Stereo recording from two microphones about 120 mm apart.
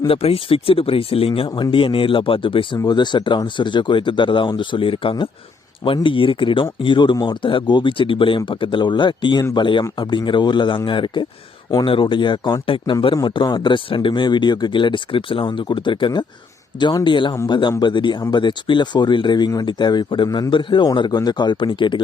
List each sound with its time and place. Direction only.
0.1 s speech: 55° left (ahead or behind)
1.5 s speech: 35° left (ahead or behind)
2.7 s speech: 35° left (ahead or behind)